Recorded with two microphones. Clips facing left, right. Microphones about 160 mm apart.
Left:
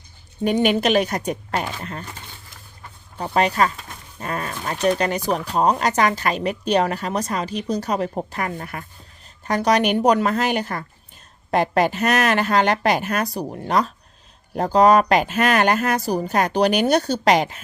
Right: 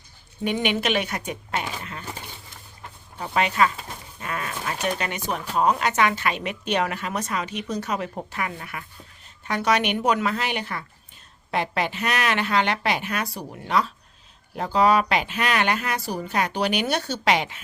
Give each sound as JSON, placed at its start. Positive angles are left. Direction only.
{"t": 0.4, "sound": "speech", "side_deg": 40}
{"t": 3.2, "sound": "speech", "side_deg": 40}